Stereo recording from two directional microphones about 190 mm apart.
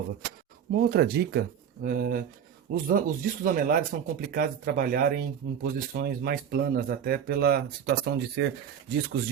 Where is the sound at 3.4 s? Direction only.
50° right (ahead or behind).